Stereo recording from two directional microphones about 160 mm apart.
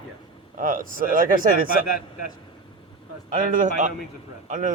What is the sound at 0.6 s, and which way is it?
Speech, 60° right (ahead or behind).